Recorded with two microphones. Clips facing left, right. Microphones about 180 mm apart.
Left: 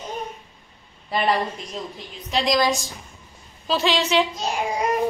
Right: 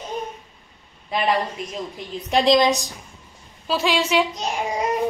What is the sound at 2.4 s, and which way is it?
Speech, 25° right (ahead or behind).